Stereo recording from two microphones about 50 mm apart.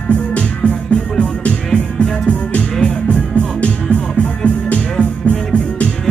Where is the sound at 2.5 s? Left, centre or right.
Left.